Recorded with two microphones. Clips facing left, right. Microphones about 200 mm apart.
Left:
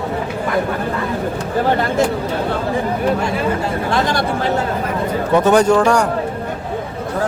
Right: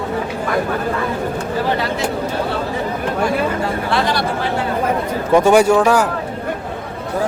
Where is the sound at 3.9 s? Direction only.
45° left (ahead or behind).